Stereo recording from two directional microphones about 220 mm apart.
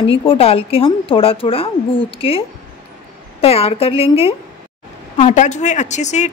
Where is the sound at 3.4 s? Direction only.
25° left (ahead or behind).